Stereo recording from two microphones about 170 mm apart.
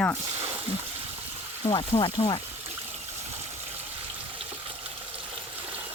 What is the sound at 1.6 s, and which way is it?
Speech, 30° left (ahead or behind).